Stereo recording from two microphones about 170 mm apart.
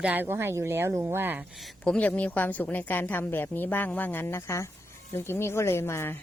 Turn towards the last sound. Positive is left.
turn(degrees=15)  # may be behind; listen again after turning